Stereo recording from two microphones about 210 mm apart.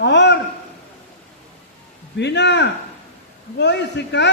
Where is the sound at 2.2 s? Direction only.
55° left (ahead or behind).